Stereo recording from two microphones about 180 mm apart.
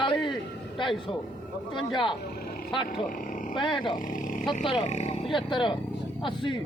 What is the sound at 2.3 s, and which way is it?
Vehicle, 60° left (ahead or behind).